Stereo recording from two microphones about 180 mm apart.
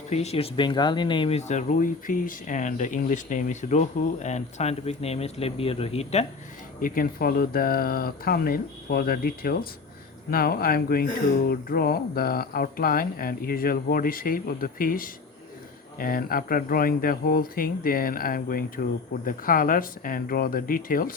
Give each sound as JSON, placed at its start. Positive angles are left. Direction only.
{"t": 0.1, "sound": "speech", "side_deg": 35}
{"t": 6.8, "sound": "speech", "side_deg": 50}